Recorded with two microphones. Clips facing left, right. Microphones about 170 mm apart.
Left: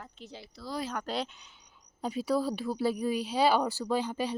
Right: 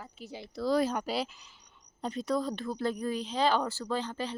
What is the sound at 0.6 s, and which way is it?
Speech, 90° right.